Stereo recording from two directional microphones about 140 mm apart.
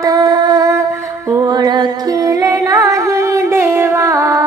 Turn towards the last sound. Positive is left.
turn(degrees=-20)  # may be behind; listen again after turning